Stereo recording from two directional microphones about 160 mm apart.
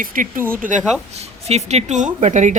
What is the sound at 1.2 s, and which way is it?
Speech, 40° right (ahead or behind).